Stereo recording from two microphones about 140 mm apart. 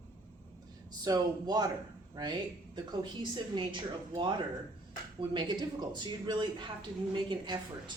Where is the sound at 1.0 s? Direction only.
30° right (ahead or behind).